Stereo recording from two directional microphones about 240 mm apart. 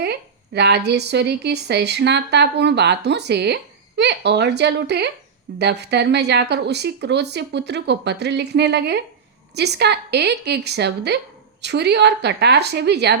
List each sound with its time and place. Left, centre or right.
0.0 s speech: right